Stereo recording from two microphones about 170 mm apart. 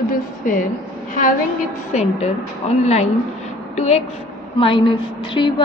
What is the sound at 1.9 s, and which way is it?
A woman's voice, 40° left (ahead or behind).